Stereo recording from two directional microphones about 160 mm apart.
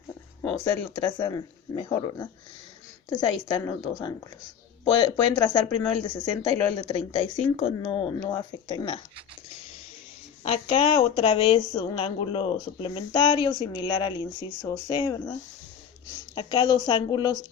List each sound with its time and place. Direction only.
0.9 s a woman's voice: 25° left (ahead or behind)
10.4 s a woman's voice: 35° left (ahead or behind)